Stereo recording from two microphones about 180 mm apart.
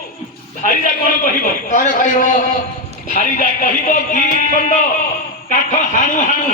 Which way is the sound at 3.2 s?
45° left (ahead or behind).